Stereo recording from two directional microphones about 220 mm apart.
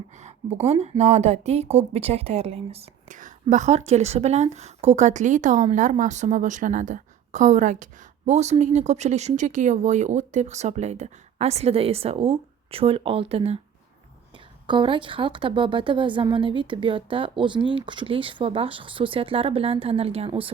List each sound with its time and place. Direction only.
0.1 s a woman's voice: 30° right (ahead or behind)